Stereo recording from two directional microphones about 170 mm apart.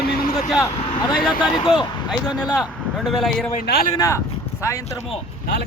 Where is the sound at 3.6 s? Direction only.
70° left (ahead or behind).